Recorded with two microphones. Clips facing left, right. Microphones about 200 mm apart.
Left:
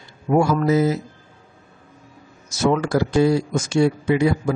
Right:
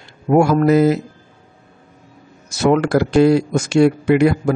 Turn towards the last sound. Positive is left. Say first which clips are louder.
# right 5 dB
turn(degrees=-65)  # may be behind; listen again after turning